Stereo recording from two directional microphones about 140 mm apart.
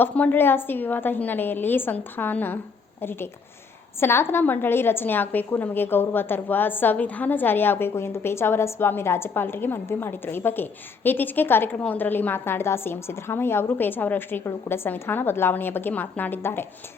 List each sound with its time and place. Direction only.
0.0 s a woman's voice: 15° left (ahead or behind)